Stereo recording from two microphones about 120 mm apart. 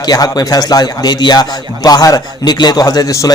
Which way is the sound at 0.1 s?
30° left (ahead or behind).